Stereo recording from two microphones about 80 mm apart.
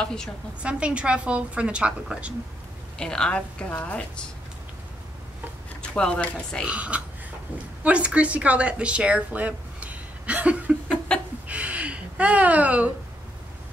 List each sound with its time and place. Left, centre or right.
0.0 s a woman's voice: centre
0.6 s a woman's voice: centre
3.0 s a woman's voice: centre
5.8 s speech: centre
6.6 s a woman's voice: centre
11.1 s a sound: centre
11.4 s a sound: centre